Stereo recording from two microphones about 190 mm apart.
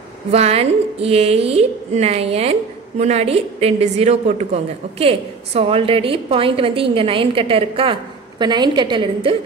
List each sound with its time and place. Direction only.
0.3 s a woman's voice: 35° right (ahead or behind)